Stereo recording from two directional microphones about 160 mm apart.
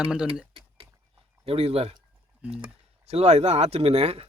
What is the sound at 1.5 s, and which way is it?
Speech, 40° right (ahead or behind).